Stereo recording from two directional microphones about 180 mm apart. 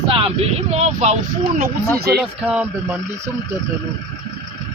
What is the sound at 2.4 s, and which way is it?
Speech, 10° right (ahead or behind).